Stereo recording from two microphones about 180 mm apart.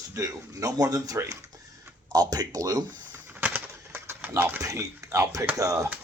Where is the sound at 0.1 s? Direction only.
20° right (ahead or behind).